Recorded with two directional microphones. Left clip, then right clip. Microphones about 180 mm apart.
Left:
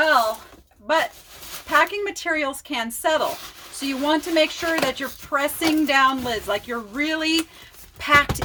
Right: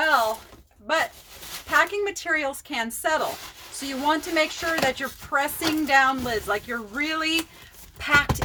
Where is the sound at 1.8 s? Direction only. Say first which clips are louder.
Left 2 dB; 10° left (ahead or behind).